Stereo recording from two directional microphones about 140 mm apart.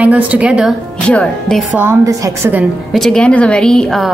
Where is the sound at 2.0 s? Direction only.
25° right (ahead or behind).